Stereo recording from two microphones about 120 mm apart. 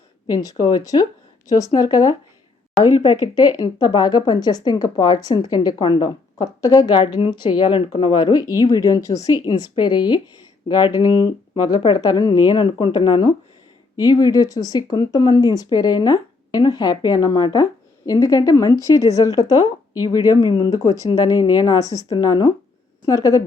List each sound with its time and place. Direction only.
0.6 s speech: 30° left (ahead or behind)
2.8 s speech: 40° left (ahead or behind)